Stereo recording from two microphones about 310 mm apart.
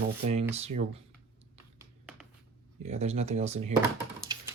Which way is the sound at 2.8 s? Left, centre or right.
Right.